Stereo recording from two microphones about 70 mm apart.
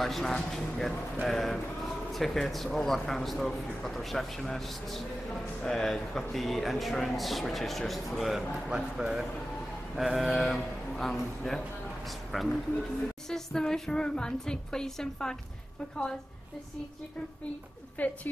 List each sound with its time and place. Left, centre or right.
0.0 s a woman's voice: centre
17.9 s speech: left